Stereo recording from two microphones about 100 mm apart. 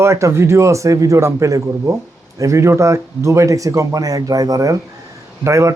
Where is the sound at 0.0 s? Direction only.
30° right (ahead or behind).